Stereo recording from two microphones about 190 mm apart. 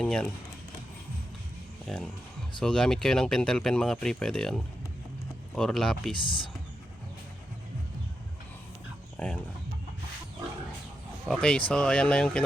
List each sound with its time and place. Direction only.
0.0 s speech: 5° left (ahead or behind)
1.9 s speech: centre (ahead or behind)
6.1 s speech: 25° left (ahead or behind)
9.1 s speech: 5° left (ahead or behind)
11.3 s speech: 5° left (ahead or behind)